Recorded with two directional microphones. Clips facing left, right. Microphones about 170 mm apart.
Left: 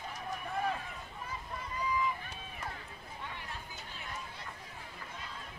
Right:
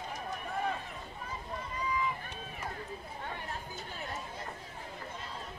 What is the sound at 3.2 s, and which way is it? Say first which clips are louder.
Chatter: right 3 dB; 45° right (ahead or behind).